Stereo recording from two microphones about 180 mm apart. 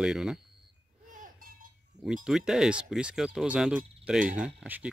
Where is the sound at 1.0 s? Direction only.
50° right (ahead or behind).